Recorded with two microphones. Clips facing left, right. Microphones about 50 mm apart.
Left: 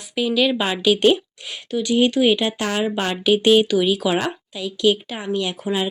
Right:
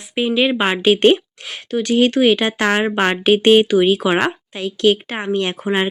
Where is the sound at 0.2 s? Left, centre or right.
Right.